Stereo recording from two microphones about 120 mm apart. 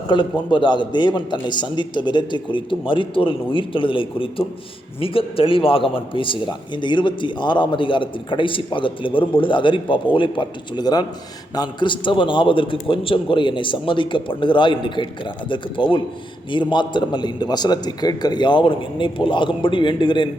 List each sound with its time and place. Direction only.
0.1 s a man's voice: 40° left (ahead or behind)